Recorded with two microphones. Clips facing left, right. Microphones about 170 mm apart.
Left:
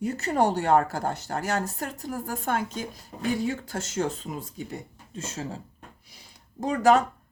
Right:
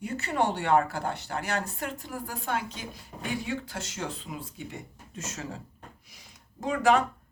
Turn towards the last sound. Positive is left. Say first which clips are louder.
# left 3 dB
turn(degrees=40)  # may be behind; listen again after turning